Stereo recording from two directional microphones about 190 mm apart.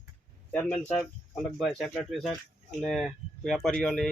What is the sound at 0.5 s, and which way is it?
Speech, 10° left (ahead or behind).